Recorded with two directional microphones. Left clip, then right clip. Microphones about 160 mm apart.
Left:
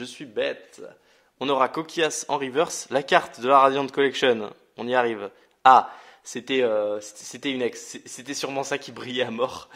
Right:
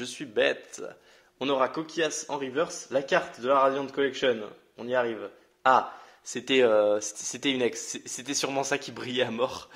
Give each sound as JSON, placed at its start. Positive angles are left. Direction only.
{"t": 0.0, "sound": "speech", "side_deg": 5}
{"t": 1.4, "sound": "a man's voice", "side_deg": 30}
{"t": 6.4, "sound": "speech", "side_deg": 5}